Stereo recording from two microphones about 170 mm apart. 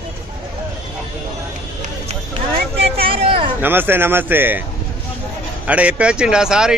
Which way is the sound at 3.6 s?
10° right (ahead or behind).